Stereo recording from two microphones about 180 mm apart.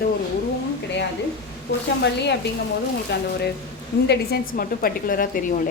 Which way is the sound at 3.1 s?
65° left (ahead or behind).